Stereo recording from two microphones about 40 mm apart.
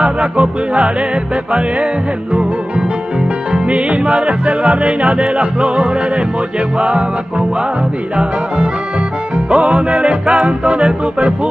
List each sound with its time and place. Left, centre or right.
0.0 s music: right
3.5 s yodeling: right
9.5 s yodeling: right